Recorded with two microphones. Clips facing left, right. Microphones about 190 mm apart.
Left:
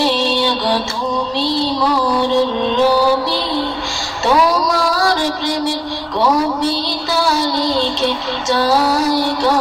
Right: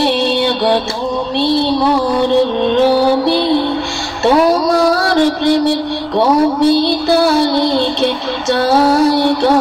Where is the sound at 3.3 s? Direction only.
60° right (ahead or behind).